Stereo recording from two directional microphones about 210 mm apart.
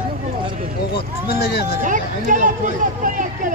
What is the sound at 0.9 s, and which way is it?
Speech, 45° left (ahead or behind).